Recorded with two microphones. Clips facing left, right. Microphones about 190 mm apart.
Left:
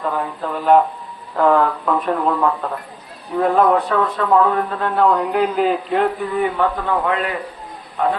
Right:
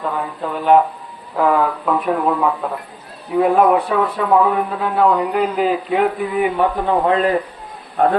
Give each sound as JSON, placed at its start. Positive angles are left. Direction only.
{"t": 0.0, "sound": "a man's voice", "side_deg": 0}
{"t": 6.9, "sound": "a man's voice", "side_deg": -35}
{"t": 8.0, "sound": "a man's voice", "side_deg": -55}